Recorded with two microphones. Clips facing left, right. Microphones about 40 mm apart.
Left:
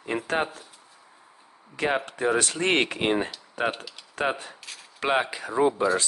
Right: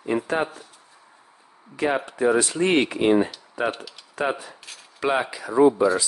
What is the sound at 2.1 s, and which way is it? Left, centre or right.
Speech, left.